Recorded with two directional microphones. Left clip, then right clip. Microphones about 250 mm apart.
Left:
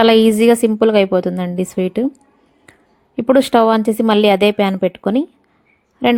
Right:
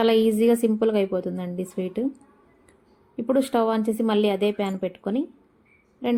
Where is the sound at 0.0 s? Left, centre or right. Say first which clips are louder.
Left 9 dB; left.